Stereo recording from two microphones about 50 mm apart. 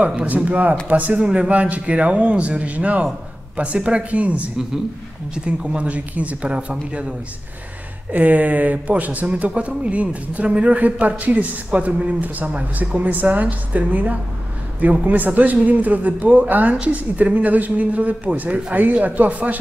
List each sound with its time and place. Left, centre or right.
0.0 s a man's voice: right
1.2 s a man's voice: centre
1.5 s a man's voice: right
8.1 s a man's voice: right